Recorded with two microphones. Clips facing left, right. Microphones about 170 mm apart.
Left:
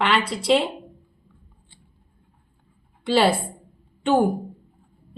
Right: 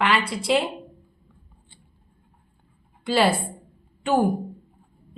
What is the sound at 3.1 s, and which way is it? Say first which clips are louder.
A woman's voice: left 2 dB; centre (ahead or behind).